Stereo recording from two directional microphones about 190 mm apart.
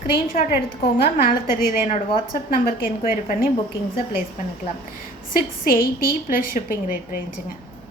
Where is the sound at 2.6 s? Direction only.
50° left (ahead or behind).